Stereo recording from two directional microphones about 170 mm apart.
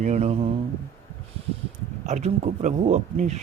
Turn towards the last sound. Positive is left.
turn(degrees=-40)  # may be behind; listen again after turning